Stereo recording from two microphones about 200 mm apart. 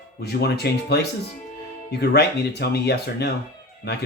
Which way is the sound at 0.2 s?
55° left (ahead or behind).